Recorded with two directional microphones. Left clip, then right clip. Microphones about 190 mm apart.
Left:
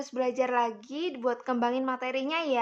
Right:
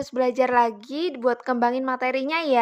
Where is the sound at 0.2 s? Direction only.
25° right (ahead or behind).